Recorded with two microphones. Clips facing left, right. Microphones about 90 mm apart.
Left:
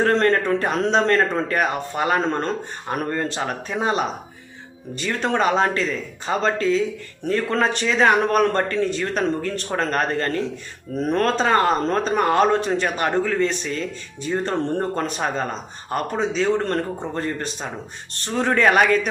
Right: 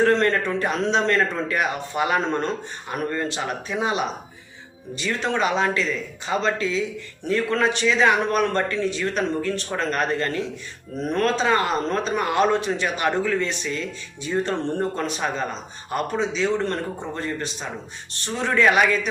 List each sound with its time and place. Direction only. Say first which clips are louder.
0.0 s speech: left 1 dB; 40° left (ahead or behind)